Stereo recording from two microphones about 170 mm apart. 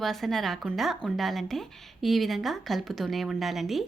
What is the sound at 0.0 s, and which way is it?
A woman's voice, centre (ahead or behind).